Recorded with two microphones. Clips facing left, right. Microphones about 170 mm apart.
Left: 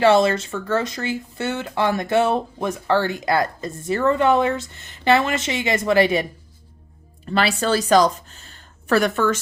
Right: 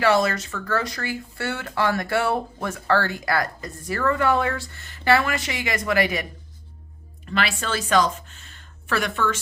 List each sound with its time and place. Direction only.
0.0 s speech: 25° left (ahead or behind)
7.3 s speech: 35° left (ahead or behind)